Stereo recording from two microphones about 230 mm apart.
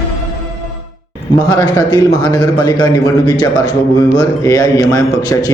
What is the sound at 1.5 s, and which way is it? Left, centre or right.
A man's voice, centre.